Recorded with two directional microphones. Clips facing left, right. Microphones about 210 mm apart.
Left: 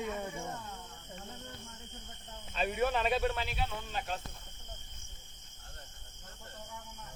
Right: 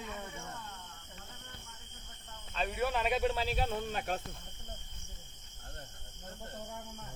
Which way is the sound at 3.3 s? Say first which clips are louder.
Right 3 dB; 35° right (ahead or behind).